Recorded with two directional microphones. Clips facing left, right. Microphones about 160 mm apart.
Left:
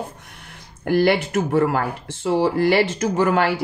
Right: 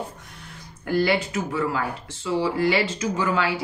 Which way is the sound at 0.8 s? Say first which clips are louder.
Left 4 dB; 65° left (ahead or behind).